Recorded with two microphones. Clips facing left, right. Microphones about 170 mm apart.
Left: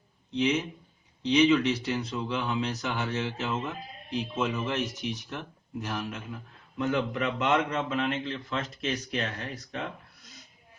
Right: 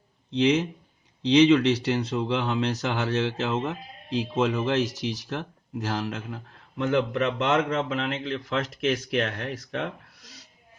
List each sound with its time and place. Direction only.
0.3 s speech: 75° right (ahead or behind)